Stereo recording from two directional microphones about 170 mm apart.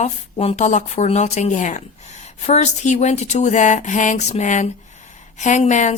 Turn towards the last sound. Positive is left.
turn(degrees=45)  # may be behind; listen again after turning